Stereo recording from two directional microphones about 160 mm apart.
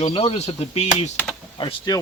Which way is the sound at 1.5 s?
25° left (ahead or behind).